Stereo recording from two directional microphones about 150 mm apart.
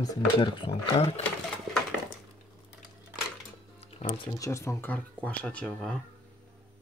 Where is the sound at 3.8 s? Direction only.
40° left (ahead or behind).